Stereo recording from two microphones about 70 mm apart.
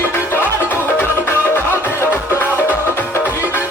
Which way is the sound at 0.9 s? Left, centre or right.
Left.